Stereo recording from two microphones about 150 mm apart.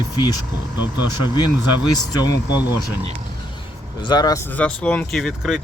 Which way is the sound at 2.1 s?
25° left (ahead or behind).